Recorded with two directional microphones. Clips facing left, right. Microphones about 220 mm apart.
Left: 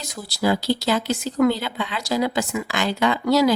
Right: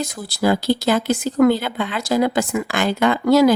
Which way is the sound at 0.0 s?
50° right (ahead or behind).